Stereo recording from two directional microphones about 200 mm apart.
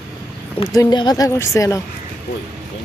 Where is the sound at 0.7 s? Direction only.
20° left (ahead or behind).